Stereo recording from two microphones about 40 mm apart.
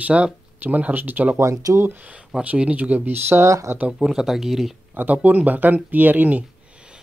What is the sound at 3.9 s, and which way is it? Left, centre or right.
Speech, centre.